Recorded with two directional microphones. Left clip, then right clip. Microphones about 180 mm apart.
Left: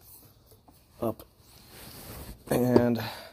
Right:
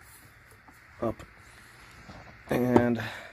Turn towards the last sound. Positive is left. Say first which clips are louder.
# left 1 dB
turn(degrees=15)  # may be behind; listen again after turning